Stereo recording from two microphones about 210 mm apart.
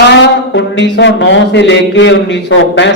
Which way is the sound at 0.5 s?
55° left (ahead or behind).